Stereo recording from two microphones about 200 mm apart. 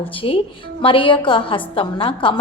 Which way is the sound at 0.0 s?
25° left (ahead or behind).